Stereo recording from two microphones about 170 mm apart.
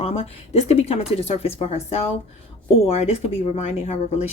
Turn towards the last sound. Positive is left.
turn(degrees=40)  # may be behind; listen again after turning